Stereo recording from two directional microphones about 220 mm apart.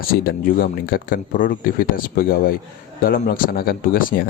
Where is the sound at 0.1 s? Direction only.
40° left (ahead or behind).